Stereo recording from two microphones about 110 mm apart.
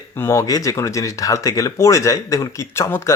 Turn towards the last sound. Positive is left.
turn(degrees=20)  # may be behind; listen again after turning